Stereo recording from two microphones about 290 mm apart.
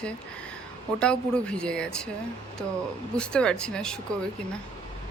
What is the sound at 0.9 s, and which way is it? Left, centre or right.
Speech, centre.